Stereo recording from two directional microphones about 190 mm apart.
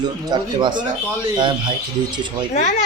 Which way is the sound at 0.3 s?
25° right (ahead or behind).